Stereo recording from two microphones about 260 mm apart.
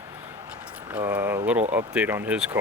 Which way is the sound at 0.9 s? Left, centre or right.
Centre.